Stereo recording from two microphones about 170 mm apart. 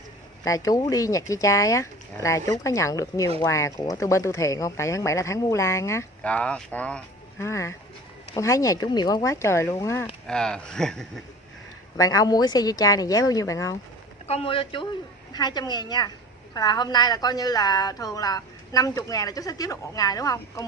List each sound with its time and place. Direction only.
0.5 s speech: 20° left (ahead or behind)
10.2 s speech: 5° left (ahead or behind)
12.0 s speech: 20° left (ahead or behind)
14.2 s speech: 35° left (ahead or behind)